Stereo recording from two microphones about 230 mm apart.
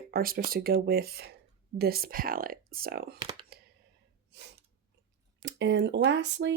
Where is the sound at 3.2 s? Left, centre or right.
Right.